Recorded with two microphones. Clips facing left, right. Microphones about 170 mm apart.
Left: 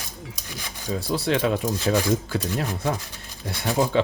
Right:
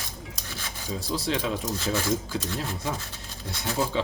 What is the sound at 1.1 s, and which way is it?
Speech, 60° left (ahead or behind).